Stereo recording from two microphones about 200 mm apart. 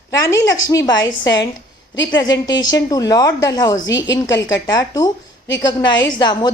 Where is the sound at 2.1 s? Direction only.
20° left (ahead or behind).